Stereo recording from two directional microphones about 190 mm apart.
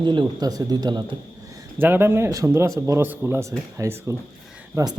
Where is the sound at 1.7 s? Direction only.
10° right (ahead or behind).